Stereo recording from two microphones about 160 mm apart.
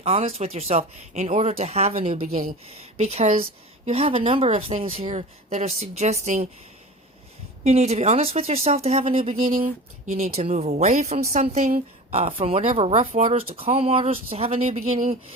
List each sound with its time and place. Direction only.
0.0 s speech: 40° right (ahead or behind)
2.2 s speech: 60° right (ahead or behind)
2.6 s speech: 40° right (ahead or behind)
7.6 s speech: 45° right (ahead or behind)
9.3 s speech: 60° right (ahead or behind)